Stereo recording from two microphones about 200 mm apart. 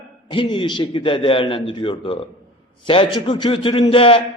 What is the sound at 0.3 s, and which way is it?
A man's voice, 25° left (ahead or behind).